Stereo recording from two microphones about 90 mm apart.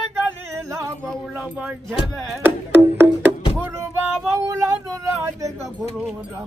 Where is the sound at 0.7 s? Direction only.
35° right (ahead or behind).